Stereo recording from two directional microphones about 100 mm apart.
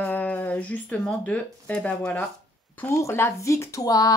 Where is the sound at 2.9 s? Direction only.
30° left (ahead or behind).